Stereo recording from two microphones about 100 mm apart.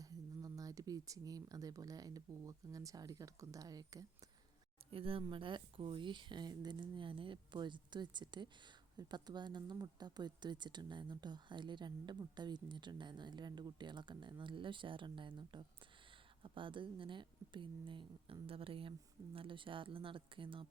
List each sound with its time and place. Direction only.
0.0 s speech: 35° right (ahead or behind)
4.9 s a woman's voice: 65° right (ahead or behind)